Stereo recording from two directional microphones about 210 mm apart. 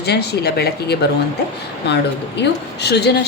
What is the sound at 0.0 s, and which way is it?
A woman's voice, 50° left (ahead or behind).